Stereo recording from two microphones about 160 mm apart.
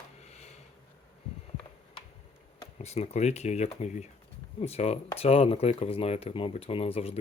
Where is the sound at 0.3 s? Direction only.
45° left (ahead or behind).